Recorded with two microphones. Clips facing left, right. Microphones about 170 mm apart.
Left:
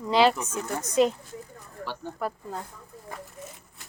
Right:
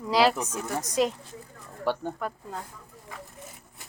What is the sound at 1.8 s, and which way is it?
Speech, 55° right (ahead or behind).